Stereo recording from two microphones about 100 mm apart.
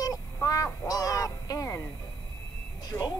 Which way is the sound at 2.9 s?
40° left (ahead or behind).